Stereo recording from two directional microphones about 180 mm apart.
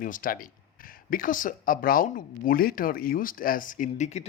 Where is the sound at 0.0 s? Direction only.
50° left (ahead or behind).